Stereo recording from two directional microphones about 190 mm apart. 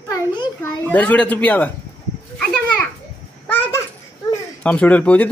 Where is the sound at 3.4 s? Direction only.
10° left (ahead or behind).